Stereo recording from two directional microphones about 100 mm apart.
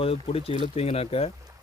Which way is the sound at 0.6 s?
85° left.